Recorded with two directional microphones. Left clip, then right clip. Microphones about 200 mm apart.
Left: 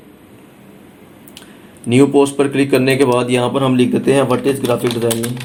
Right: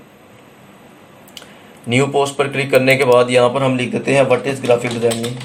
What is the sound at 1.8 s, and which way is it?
Speech, 35° left (ahead or behind).